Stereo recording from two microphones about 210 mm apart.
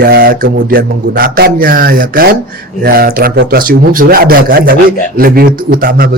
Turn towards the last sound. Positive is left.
turn(degrees=-50)  # may be behind; listen again after turning